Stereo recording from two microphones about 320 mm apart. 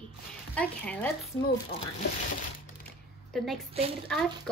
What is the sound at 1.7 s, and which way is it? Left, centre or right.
Speech, centre.